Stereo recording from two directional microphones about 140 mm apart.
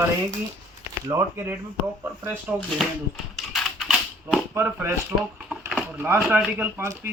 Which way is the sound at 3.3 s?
Centre (ahead or behind).